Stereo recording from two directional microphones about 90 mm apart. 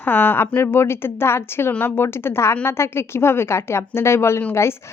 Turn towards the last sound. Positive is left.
turn(degrees=30)  # may be behind; listen again after turning